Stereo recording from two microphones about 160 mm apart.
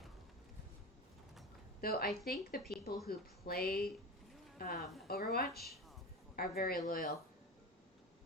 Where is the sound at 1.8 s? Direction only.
70° left (ahead or behind).